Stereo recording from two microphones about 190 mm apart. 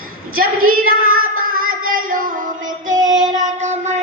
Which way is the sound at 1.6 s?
90° right.